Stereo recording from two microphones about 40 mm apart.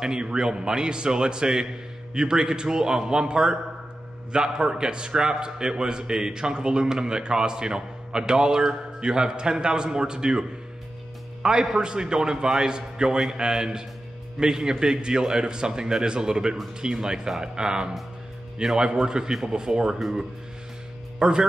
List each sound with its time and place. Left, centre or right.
0.0 s a man's voice: centre
11.4 s a man's voice: centre
21.2 s speech: right